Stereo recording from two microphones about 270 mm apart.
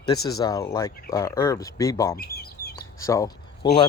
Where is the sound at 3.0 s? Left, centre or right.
Centre.